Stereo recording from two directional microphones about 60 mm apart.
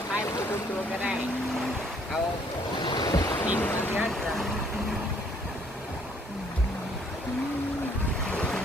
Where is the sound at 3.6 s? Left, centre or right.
Left.